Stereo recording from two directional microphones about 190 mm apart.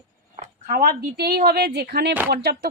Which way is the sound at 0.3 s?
45° right (ahead or behind).